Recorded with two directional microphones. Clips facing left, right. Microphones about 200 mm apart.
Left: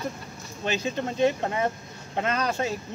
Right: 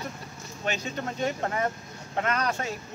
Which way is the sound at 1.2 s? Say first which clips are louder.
Left 5 dB; 25° left (ahead or behind).